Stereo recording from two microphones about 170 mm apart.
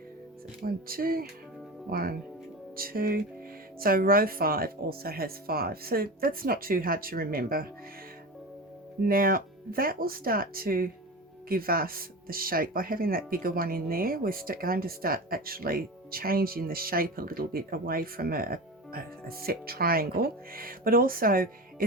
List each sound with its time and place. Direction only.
0.6 s speech: 60° right (ahead or behind)
9.0 s speech: 60° right (ahead or behind)